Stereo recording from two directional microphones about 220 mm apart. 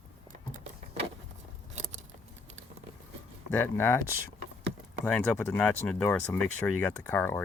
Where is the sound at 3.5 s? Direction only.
10° left (ahead or behind).